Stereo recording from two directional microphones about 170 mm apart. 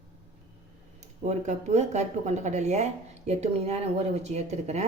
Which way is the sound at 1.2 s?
45° right (ahead or behind).